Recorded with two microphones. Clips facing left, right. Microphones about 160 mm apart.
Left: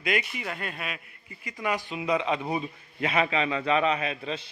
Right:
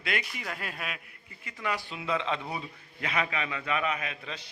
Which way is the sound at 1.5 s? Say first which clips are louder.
Left 4 dB; 15° left (ahead or behind).